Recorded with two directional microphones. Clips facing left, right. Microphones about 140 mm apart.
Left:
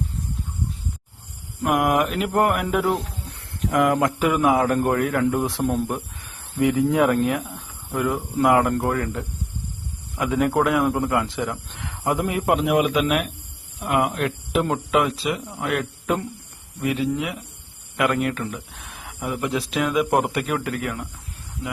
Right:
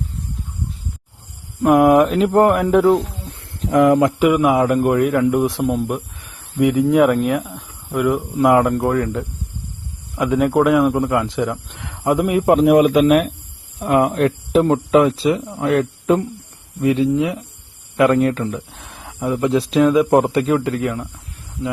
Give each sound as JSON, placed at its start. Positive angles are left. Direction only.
{"t": 1.7, "sound": "speech", "side_deg": 0}
{"t": 2.3, "sound": "speech", "side_deg": -20}
{"t": 12.5, "sound": "speech", "side_deg": -40}